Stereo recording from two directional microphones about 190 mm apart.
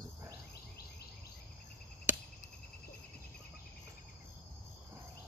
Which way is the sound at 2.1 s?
10° right (ahead or behind).